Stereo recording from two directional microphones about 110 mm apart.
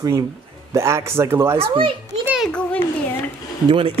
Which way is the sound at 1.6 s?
55° right (ahead or behind).